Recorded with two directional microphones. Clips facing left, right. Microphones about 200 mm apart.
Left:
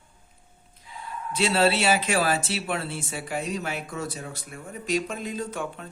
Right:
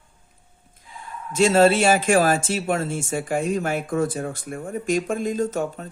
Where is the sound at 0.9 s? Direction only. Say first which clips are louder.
Right 7 dB; 45° right (ahead or behind).